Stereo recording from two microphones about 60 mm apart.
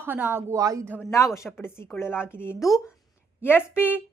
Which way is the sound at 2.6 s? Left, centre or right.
Centre.